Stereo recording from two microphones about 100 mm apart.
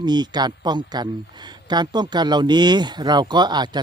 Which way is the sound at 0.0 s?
45° right (ahead or behind).